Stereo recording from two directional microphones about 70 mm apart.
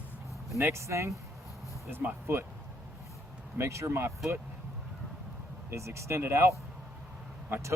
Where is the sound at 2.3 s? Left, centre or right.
Right.